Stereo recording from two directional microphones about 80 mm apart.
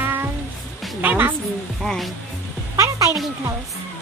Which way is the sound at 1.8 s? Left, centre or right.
Centre.